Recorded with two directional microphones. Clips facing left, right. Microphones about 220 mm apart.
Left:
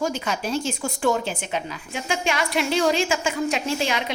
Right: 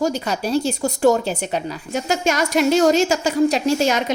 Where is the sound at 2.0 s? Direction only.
45° right (ahead or behind).